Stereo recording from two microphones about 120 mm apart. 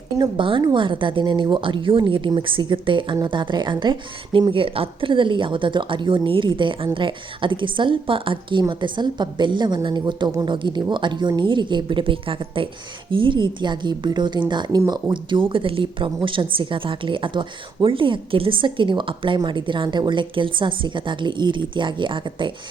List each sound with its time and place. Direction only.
0.2 s speech: 45° right (ahead or behind)
14.8 s speech: 30° right (ahead or behind)
15.1 s speech: 45° right (ahead or behind)